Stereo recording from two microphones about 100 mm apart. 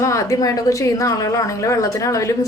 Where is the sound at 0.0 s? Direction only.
30° left (ahead or behind).